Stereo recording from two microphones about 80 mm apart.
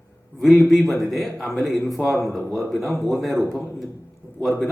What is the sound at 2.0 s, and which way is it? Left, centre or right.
Speech, right.